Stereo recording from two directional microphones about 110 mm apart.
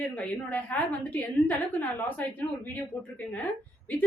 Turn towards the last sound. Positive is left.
turn(degrees=15)  # may be behind; listen again after turning